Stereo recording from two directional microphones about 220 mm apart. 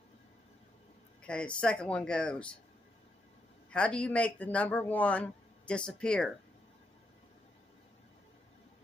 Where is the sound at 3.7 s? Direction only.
5° left (ahead or behind).